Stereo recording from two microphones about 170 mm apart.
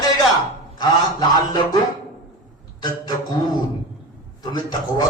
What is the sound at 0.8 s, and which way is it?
A man's voice, 25° left (ahead or behind).